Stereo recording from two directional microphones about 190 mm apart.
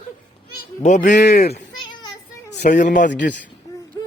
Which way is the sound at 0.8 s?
40° left (ahead or behind).